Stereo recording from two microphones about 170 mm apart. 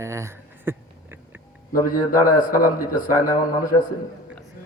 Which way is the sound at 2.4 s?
55° left (ahead or behind).